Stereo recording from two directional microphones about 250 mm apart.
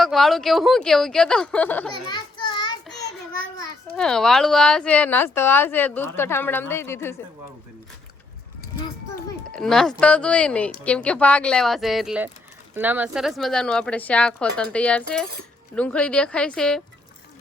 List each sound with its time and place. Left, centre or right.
0.0 s a woman's voice: centre
2.0 s children playing: centre
3.9 s a woman's voice: centre
9.5 s a woman's voice: centre